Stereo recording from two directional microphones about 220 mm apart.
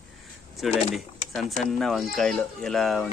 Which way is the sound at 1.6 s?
Centre (ahead or behind).